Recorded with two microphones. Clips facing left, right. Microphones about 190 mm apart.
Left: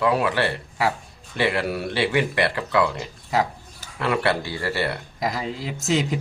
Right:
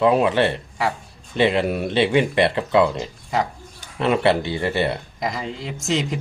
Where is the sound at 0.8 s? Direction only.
Centre (ahead or behind).